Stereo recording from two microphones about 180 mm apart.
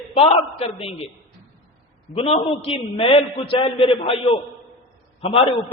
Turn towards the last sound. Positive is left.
turn(degrees=30)  # may be behind; listen again after turning